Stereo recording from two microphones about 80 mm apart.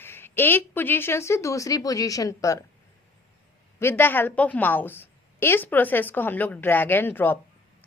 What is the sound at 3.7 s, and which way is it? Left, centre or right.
A woman's voice, left.